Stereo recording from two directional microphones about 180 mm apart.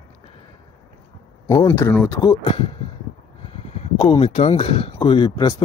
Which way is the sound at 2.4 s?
30° left (ahead or behind).